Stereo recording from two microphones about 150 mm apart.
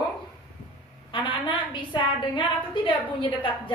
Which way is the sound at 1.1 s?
30° left (ahead or behind).